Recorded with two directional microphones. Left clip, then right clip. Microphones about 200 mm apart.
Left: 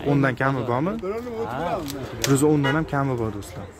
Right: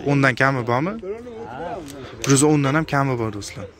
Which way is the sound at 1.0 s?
55° left (ahead or behind).